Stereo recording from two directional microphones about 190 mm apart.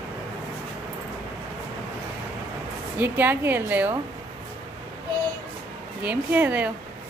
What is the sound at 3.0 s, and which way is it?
Speech, 10° right (ahead or behind).